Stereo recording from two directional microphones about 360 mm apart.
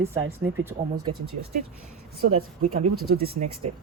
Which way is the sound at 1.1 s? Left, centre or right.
Right.